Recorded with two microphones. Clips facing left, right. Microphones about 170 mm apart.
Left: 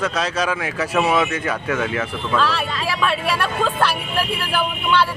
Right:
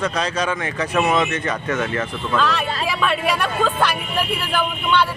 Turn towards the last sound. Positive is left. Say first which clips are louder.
# even
turn(degrees=5)  # may be behind; listen again after turning